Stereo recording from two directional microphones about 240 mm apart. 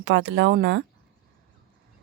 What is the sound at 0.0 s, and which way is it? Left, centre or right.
Speech, right.